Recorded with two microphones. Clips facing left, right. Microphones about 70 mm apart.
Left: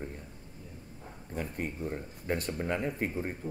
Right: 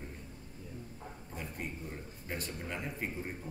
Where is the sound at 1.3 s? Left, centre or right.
Left.